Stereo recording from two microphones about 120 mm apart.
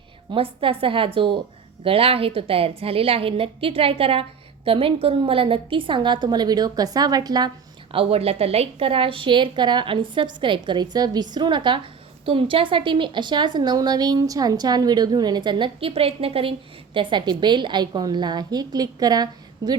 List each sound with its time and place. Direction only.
0.3 s a woman's voice: 50° right (ahead or behind)
7.9 s a woman's voice: 55° right (ahead or behind); by 19.7 s 35° right (ahead or behind)